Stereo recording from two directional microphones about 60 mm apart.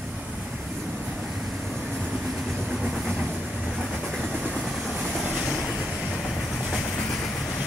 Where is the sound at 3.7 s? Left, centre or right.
Centre.